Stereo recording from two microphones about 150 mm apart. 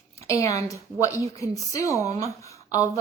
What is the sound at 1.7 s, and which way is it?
A woman's voice, 20° left (ahead or behind).